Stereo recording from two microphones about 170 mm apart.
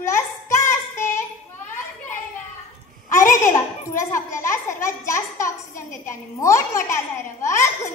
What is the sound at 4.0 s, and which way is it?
A child's voice, 15° left (ahead or behind).